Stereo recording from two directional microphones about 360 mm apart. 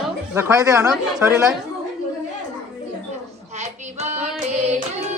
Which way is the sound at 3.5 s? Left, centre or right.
Centre.